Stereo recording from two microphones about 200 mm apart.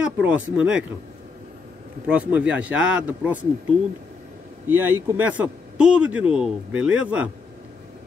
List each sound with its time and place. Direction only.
0.0 s speech: 5° right (ahead or behind)
2.0 s speech: 5° right (ahead or behind)
4.6 s speech: 10° right (ahead or behind)